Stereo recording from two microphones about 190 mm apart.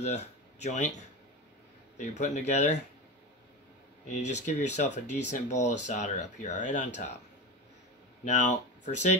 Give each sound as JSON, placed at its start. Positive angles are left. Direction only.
{"t": 0.0, "sound": "speech", "side_deg": 35}
{"t": 4.1, "sound": "speech", "side_deg": 40}
{"t": 8.3, "sound": "speech", "side_deg": 40}